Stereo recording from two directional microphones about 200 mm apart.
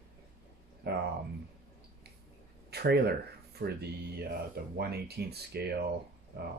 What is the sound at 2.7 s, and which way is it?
Speech, 55° right (ahead or behind).